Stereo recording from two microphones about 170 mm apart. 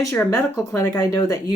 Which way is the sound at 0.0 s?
15° left (ahead or behind).